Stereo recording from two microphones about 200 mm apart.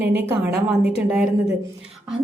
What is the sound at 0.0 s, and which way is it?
Speech, 55° right (ahead or behind).